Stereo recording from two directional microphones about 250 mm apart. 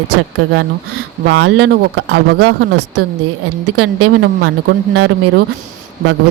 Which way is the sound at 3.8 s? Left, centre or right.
Right.